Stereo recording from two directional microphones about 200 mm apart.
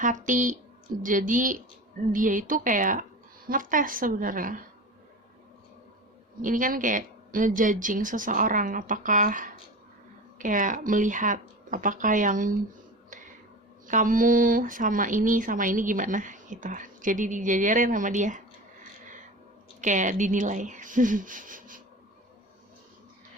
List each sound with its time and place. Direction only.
0.0 s a woman's voice: 40° right (ahead or behind)
6.4 s speech: 40° right (ahead or behind)
13.8 s speech: 40° right (ahead or behind)
19.8 s speech: 40° right (ahead or behind)